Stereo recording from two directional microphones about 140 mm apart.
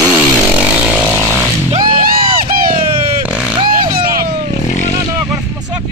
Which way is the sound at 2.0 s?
90° right.